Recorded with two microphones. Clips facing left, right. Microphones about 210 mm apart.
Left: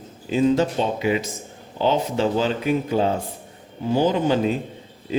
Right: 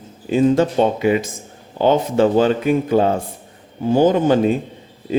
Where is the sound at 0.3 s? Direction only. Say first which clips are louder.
Right 4 dB; 50° right (ahead or behind).